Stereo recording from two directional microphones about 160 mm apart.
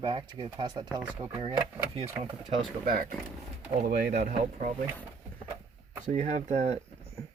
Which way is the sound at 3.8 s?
80° right.